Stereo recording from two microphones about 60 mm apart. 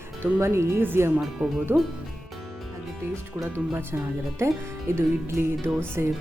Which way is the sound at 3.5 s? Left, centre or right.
Right.